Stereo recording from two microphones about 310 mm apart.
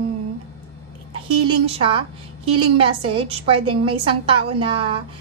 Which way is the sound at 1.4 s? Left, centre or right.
Centre.